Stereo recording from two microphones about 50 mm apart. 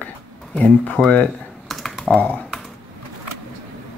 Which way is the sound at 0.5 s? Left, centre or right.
Left.